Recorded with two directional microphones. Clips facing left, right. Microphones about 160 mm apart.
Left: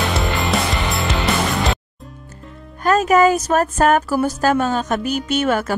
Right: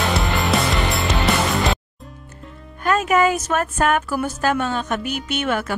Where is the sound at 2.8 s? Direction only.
40° left (ahead or behind).